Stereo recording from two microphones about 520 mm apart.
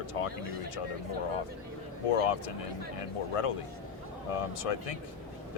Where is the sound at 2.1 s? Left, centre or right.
Left.